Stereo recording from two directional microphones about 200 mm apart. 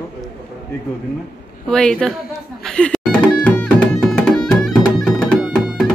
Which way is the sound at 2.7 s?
5° left (ahead or behind).